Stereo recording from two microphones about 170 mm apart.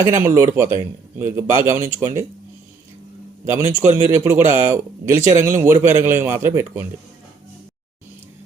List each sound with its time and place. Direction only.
0.0 s speech: 15° right (ahead or behind)
3.5 s speech: 15° right (ahead or behind)